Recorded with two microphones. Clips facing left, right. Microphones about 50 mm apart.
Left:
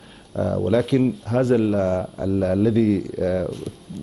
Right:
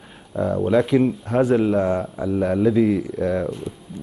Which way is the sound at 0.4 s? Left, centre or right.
Centre.